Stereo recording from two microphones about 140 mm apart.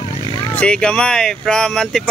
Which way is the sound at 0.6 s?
5° left (ahead or behind).